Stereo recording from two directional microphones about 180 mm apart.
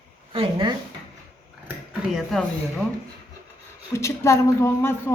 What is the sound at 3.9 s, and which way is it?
A woman's voice, 15° left (ahead or behind).